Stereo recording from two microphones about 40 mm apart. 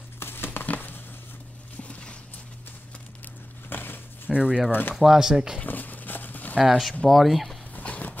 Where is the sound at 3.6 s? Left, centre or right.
Left.